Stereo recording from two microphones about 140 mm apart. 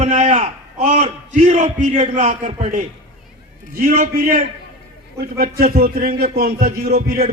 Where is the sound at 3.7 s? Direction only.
90° right.